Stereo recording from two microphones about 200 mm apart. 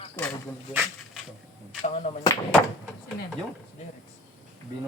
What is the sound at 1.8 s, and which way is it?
Speech, 35° left (ahead or behind).